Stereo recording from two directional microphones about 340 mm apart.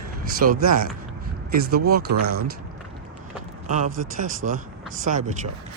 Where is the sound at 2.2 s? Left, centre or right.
Right.